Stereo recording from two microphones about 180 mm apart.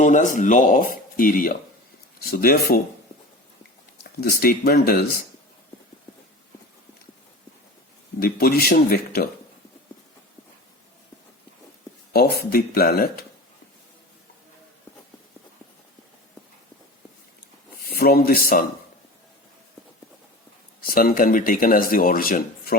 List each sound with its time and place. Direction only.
0.0 s speech: 45° left (ahead or behind)
4.2 s speech: 55° left (ahead or behind)
8.2 s speech: 55° left (ahead or behind)
12.1 s speech: 60° left (ahead or behind)
17.7 s speech: 55° left (ahead or behind)
20.8 s speech: 50° left (ahead or behind)